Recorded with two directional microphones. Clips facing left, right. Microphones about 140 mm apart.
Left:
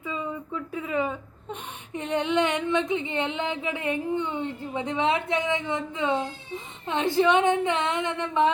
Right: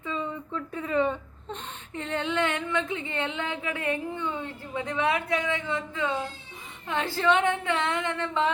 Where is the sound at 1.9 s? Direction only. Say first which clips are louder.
Left 4 dB; 15° left (ahead or behind).